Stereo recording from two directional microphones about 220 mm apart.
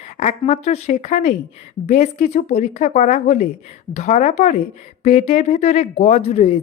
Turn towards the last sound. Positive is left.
turn(degrees=30)  # may be behind; listen again after turning